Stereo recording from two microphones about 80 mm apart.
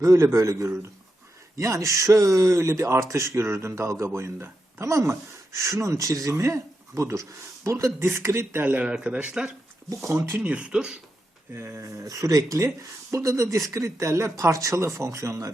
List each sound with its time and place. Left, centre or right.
0.0 s speech: right
8.6 s speech: centre
10.1 s speech: right
10.4 s speech: centre
11.5 s speech: right